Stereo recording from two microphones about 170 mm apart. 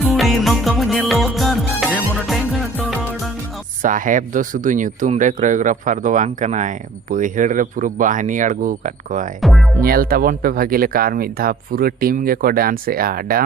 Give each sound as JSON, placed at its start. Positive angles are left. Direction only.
{"t": 0.0, "sound": "music", "side_deg": 0}
{"t": 3.8, "sound": "speech", "side_deg": -50}
{"t": 9.4, "sound": "speech", "side_deg": 0}
{"t": 9.8, "sound": "speech", "side_deg": -60}